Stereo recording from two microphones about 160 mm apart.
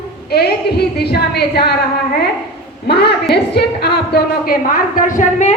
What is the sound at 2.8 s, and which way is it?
A woman's voice, 90° left.